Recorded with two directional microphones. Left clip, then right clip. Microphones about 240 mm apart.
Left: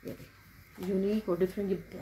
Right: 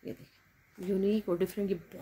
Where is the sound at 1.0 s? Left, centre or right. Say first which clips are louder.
Even; right.